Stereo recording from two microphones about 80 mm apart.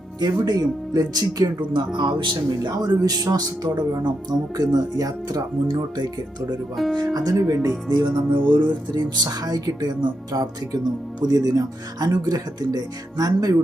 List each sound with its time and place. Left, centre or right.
0.2 s speech: right
2.0 s speech: right
5.7 s speech: right
7.3 s speech: right
7.9 s speech: right